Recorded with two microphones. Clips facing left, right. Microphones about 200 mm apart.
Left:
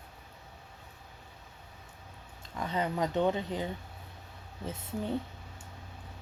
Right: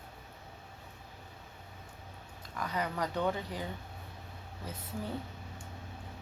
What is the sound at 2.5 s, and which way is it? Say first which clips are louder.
Speech: left 3 dB; 25° left (ahead or behind).